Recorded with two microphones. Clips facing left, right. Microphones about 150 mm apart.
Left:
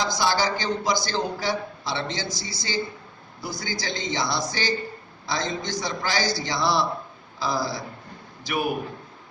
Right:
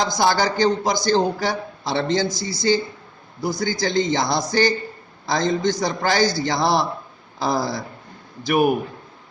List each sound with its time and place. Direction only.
0.0 s speech: 50° right (ahead or behind)